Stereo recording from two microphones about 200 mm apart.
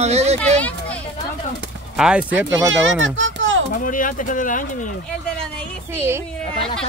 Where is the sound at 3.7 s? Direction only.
45° left (ahead or behind).